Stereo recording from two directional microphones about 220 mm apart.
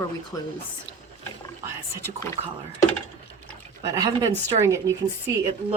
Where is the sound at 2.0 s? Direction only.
10° left (ahead or behind).